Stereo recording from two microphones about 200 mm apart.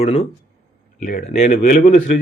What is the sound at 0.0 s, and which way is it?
Speech, 30° left (ahead or behind).